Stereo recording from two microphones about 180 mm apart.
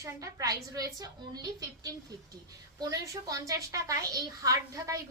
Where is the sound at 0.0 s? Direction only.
20° right (ahead or behind).